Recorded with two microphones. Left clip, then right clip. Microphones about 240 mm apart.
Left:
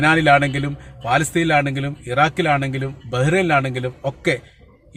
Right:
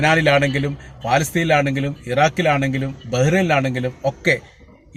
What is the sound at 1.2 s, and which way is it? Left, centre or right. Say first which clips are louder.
A man's voice: even; centre.